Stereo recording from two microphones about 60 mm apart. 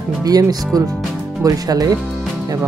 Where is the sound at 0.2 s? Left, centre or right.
Right.